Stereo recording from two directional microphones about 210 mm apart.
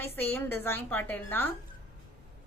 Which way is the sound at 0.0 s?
10° left (ahead or behind).